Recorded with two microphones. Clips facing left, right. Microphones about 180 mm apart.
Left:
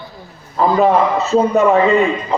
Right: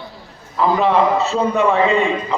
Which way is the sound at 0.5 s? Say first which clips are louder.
Left 2 dB; 45° left (ahead or behind).